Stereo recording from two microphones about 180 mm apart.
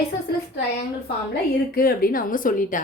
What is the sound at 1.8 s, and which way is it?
A woman's voice, 55° left (ahead or behind).